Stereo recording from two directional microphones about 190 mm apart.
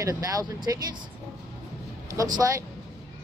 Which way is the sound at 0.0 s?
20° right (ahead or behind).